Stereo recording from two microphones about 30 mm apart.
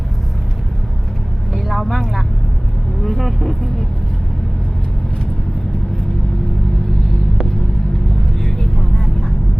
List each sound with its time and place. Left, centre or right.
1.5 s vehicle: centre
8.4 s vehicle: centre